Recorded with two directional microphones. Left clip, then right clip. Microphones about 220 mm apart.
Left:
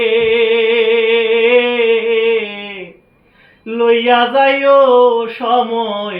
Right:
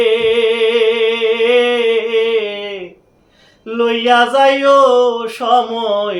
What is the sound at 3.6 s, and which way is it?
Mantra, 25° right (ahead or behind).